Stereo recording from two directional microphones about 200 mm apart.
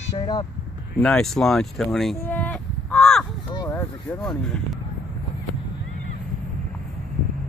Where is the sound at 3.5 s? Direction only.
15° left (ahead or behind).